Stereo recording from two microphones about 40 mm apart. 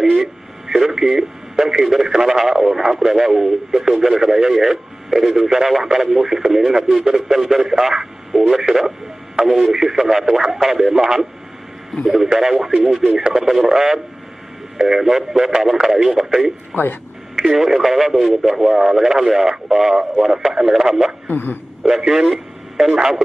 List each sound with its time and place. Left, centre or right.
0.2 s speech: centre
13.0 s speech: right
13.3 s speech: centre
16.7 s speech: left
17.5 s speech: centre
21.3 s speech: left
21.8 s speech: centre